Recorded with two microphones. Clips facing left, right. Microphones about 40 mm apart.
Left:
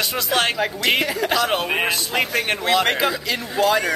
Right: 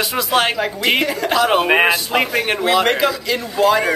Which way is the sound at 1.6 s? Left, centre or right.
Right.